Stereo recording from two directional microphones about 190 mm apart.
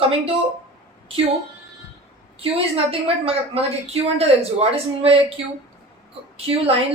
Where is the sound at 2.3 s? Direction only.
30° right (ahead or behind).